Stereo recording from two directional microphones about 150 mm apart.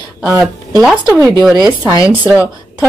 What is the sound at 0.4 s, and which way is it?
Speech, 5° right (ahead or behind).